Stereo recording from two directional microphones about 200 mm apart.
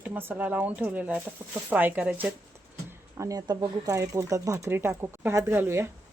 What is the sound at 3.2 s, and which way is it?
Speech, 15° right (ahead or behind).